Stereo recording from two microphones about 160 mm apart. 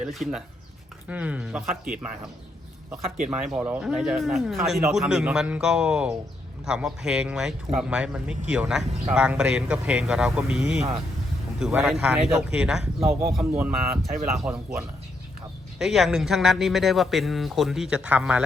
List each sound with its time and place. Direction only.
0.0 s a man's voice: centre (ahead or behind)
3.2 s a man's voice: 5° right (ahead or behind)
13.4 s speech: 15° right (ahead or behind)
15.8 s a man's voice: centre (ahead or behind)